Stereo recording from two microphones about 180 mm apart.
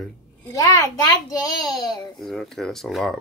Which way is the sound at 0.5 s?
15° left (ahead or behind).